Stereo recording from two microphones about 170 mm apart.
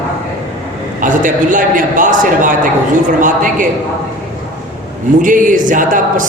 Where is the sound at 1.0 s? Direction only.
50° right (ahead or behind).